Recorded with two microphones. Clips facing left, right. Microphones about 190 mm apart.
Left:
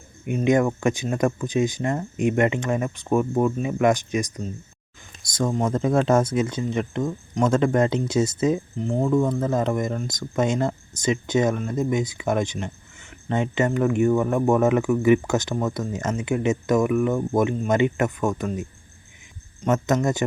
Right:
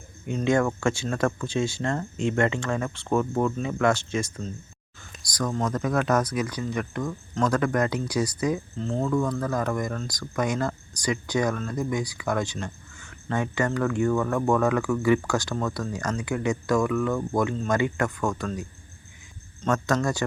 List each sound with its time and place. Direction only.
0.3 s speech: 15° left (ahead or behind)